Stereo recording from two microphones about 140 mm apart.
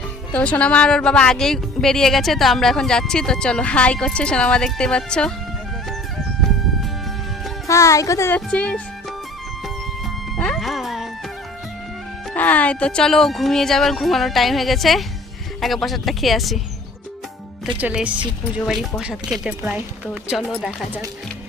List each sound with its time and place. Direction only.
0.3 s speech: 10° left (ahead or behind)
7.7 s speech: 20° left (ahead or behind)
8.4 s speech: 5° left (ahead or behind)
10.3 s music: 5° left (ahead or behind)
12.3 s speech: 10° left (ahead or behind)
17.7 s speech: 10° right (ahead or behind)